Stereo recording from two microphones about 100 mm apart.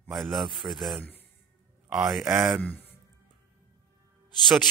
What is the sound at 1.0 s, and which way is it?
Speech, 20° left (ahead or behind).